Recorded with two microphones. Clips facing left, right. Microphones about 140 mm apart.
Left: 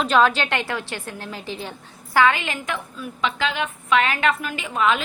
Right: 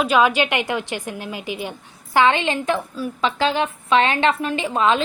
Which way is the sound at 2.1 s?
25° right (ahead or behind).